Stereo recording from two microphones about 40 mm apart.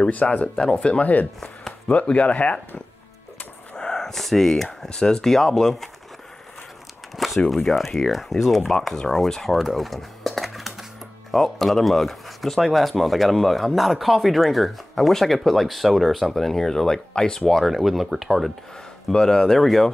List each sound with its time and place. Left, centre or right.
0.1 s speech: left
3.7 s a sound: centre
4.6 s speech: centre
7.2 s a sound: centre
7.5 s speech: centre
17.5 s speech: centre
19.1 s speech: centre
19.4 s speech: centre